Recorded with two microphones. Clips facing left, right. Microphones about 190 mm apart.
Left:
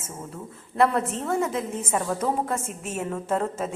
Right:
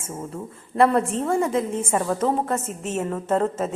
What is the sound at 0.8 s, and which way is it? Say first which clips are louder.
Speech: right 4 dB; centre (ahead or behind).